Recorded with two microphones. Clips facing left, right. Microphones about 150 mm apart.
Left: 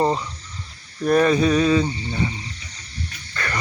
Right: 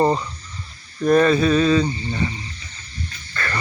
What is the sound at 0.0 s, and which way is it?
Speech, centre (ahead or behind).